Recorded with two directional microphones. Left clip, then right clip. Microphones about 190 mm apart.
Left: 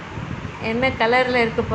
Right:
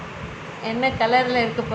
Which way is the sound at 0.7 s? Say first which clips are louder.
Left 1 dB; 10° left (ahead or behind).